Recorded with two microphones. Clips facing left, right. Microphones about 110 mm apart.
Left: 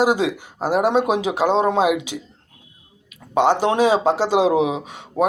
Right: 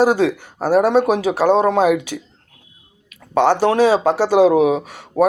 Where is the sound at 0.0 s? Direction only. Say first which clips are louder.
Right 3 dB; 15° left (ahead or behind).